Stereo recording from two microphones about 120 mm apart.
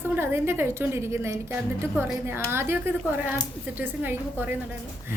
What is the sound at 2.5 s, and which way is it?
A woman's voice, 20° right (ahead or behind).